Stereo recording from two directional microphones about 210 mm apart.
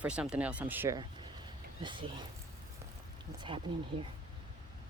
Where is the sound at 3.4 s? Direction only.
25° right (ahead or behind).